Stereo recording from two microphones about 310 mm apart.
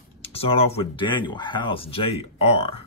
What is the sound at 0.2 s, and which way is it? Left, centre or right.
Speech, centre.